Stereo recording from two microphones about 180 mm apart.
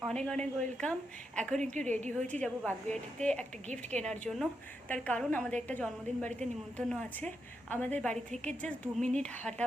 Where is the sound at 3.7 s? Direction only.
40° right (ahead or behind).